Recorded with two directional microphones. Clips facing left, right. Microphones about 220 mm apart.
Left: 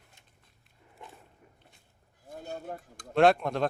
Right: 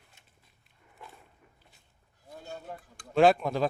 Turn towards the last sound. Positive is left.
turn(degrees=0)  # may be behind; listen again after turning